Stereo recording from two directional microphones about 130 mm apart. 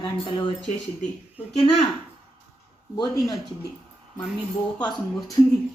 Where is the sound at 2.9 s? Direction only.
30° left (ahead or behind).